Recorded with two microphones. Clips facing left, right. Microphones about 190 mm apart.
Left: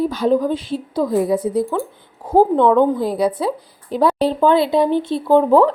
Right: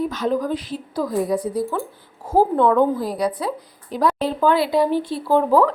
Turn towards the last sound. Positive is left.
turn(degrees=25)  # may be behind; listen again after turning